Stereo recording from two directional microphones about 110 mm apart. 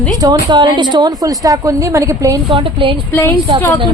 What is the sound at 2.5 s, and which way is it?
Speech, 50° right (ahead or behind).